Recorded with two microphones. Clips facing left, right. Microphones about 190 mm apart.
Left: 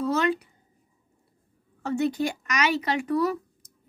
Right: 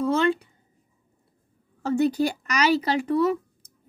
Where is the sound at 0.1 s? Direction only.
30° right (ahead or behind).